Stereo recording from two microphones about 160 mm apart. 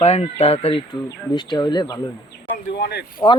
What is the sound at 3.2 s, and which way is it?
Speech, 20° left (ahead or behind).